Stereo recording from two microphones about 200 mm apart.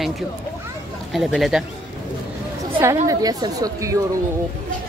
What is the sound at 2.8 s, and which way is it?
A woman's voice, 15° right (ahead or behind).